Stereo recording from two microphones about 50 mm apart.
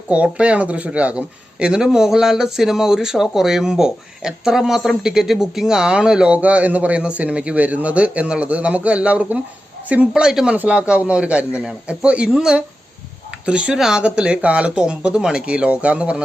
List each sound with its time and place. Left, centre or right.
0.1 s speech: right
6.3 s a man's voice: right
10.1 s a man's voice: centre
12.3 s speech: centre
13.4 s a man's voice: right
13.7 s speech: centre
14.0 s a man's voice: right